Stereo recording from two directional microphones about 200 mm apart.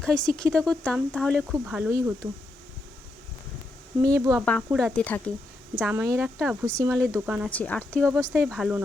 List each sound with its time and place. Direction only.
0.0 s speech: 5° left (ahead or behind)
1.7 s speech: 10° right (ahead or behind)
4.0 s speech: 15° right (ahead or behind)
4.7 s speech: centre (ahead or behind)
5.8 s speech: 15° right (ahead or behind)
7.5 s speech: 5° left (ahead or behind)